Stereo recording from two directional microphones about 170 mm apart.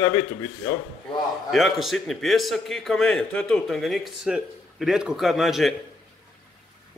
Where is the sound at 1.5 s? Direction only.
Centre (ahead or behind).